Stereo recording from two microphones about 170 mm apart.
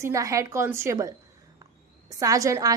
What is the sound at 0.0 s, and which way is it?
A woman's voice, 20° right (ahead or behind).